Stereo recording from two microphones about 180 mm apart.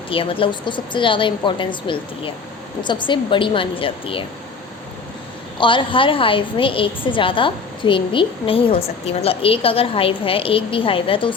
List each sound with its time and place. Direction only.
0.1 s a woman's voice: 30° left (ahead or behind)
5.5 s a woman's voice: 25° left (ahead or behind)